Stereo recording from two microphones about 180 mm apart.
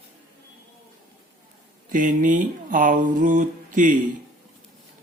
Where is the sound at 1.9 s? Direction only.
45° right (ahead or behind).